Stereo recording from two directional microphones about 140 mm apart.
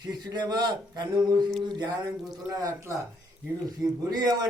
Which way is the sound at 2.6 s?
20° right (ahead or behind).